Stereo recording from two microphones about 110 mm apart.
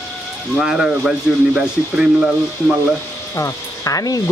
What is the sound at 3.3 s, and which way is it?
Speech, 30° left (ahead or behind).